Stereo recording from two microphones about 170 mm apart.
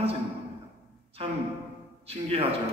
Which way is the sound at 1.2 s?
35° right (ahead or behind).